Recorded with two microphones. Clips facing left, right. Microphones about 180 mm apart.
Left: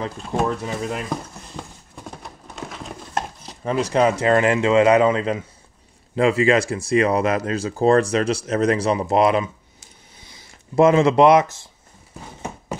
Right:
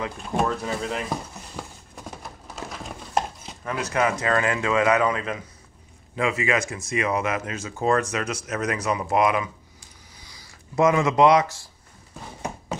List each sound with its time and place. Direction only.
0.3 s speech: 5° left (ahead or behind)
2.2 s a sound: centre (ahead or behind)
3.6 s speech: 25° left (ahead or behind)